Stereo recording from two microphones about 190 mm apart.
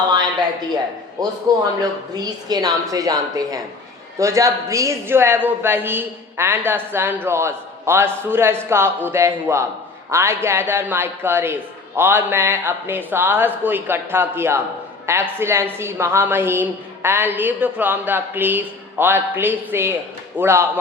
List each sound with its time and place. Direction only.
1.2 s a woman's voice: 20° right (ahead or behind)